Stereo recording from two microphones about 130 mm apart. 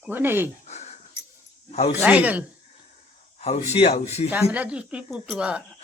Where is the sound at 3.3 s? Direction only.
55° left (ahead or behind).